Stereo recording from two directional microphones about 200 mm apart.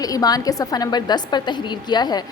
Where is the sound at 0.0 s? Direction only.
20° left (ahead or behind).